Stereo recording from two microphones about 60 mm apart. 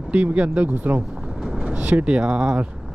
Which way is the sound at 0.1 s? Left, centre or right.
Right.